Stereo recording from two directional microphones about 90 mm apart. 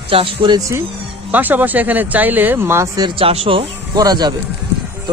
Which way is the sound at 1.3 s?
20° right (ahead or behind).